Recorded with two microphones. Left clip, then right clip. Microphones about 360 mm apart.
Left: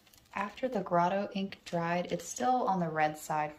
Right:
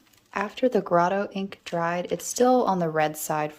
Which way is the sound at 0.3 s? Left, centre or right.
Centre.